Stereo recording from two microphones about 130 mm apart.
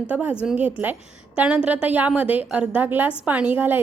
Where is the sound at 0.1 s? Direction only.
10° right (ahead or behind).